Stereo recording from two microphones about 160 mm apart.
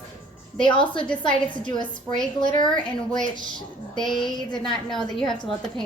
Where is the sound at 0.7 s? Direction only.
30° left (ahead or behind).